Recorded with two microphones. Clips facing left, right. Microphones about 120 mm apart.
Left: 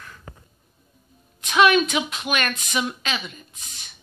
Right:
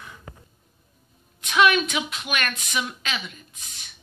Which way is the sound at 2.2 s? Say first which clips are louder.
Left 3 dB; 5° left (ahead or behind).